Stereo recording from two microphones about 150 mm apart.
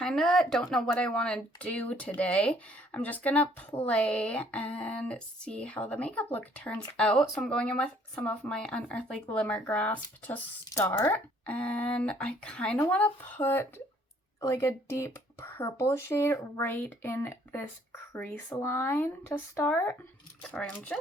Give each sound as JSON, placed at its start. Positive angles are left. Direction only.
{"t": 0.0, "sound": "speech", "side_deg": 5}